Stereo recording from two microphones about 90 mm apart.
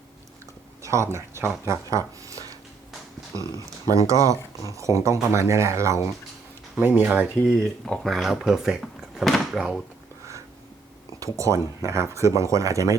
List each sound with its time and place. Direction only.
0.8 s speech: 35° right (ahead or behind)
6.7 s speech: 20° right (ahead or behind)
7.4 s speech: 5° left (ahead or behind)
11.2 s speech: 35° right (ahead or behind)